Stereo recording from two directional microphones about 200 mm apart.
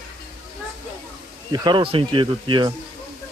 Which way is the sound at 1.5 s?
20° right (ahead or behind).